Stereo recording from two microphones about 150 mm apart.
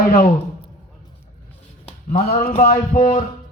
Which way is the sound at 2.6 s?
70° left (ahead or behind).